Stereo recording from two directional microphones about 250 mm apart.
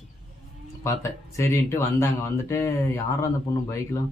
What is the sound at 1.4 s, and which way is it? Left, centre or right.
Speech, centre.